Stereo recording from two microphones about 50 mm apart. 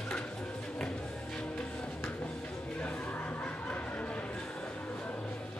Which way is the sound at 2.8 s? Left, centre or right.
Left.